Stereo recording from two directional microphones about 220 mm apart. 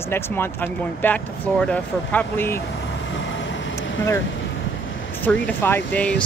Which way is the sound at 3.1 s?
55° left (ahead or behind).